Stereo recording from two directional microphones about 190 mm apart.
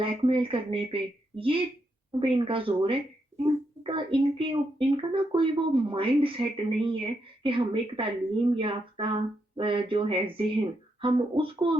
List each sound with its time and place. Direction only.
0.0 s speech: 25° right (ahead or behind)